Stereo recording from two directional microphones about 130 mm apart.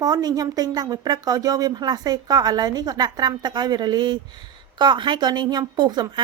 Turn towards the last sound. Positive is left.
turn(degrees=-35)  # may be behind; listen again after turning